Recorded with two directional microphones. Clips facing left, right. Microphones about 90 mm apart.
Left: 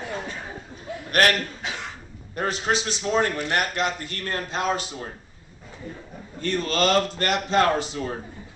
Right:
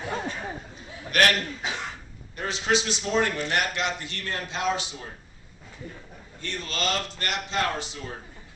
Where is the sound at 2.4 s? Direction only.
45° left (ahead or behind).